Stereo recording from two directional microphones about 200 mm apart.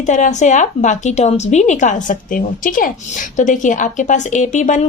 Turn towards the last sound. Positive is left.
turn(degrees=35)  # may be behind; listen again after turning